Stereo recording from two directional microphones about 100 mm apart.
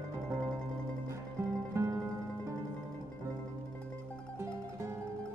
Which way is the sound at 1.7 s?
30° right (ahead or behind).